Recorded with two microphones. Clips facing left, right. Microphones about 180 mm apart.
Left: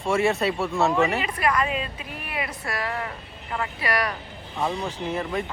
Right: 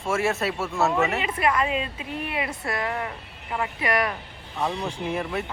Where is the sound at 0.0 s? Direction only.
Centre (ahead or behind).